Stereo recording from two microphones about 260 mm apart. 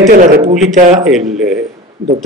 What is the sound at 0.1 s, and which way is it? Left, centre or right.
Speech, right.